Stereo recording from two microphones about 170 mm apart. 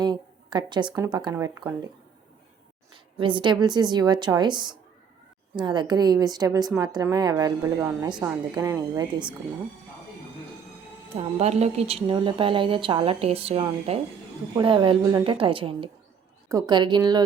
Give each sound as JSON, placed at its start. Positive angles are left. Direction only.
{"t": 0.0, "sound": "speech", "side_deg": -25}
{"t": 2.9, "sound": "a woman's voice", "side_deg": -30}
{"t": 11.2, "sound": "a woman's voice", "side_deg": -40}